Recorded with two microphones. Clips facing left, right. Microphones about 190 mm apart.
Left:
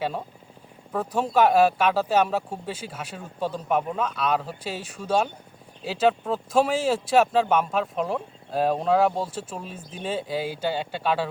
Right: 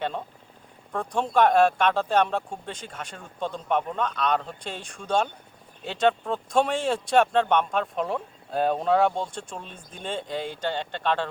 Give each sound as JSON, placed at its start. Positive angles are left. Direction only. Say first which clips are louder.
{"t": 0.0, "sound": "speech", "louder": "left 1 dB", "side_deg": 5}